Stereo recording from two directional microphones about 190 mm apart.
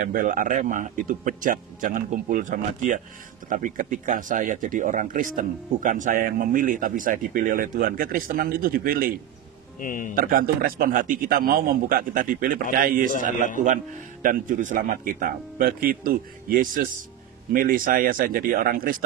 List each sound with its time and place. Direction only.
0.0 s speech: 45° right (ahead or behind)
9.8 s speech: 45° left (ahead or behind)
10.1 s speech: 50° right (ahead or behind)
14.2 s speech: 45° right (ahead or behind)